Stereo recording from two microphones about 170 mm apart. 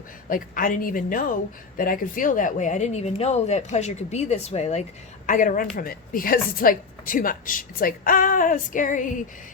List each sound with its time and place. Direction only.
0.3 s a woman's voice: 55° left (ahead or behind)